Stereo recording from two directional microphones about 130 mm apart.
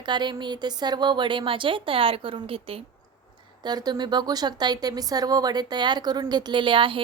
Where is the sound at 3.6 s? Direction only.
30° right (ahead or behind).